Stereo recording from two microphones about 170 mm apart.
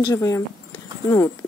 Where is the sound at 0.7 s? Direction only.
20° left (ahead or behind).